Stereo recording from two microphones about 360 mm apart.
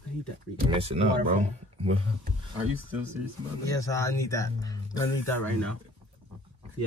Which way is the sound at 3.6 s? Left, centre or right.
Centre.